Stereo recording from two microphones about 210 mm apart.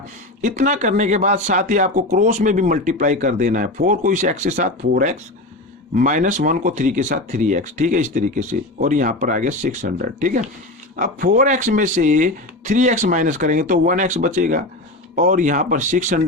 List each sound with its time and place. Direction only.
0.4 s speech: 35° right (ahead or behind)